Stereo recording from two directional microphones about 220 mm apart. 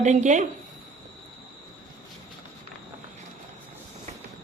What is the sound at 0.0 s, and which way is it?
Speech, 35° right (ahead or behind).